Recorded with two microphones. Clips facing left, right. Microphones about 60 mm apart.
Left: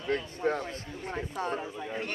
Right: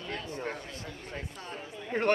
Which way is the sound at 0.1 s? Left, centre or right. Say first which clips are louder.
Left 8 dB; left.